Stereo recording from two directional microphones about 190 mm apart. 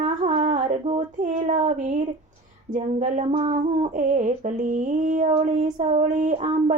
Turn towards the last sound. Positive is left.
turn(degrees=-40)  # may be behind; listen again after turning